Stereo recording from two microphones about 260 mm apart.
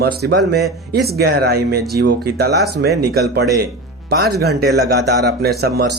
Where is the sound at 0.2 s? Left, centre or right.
Right.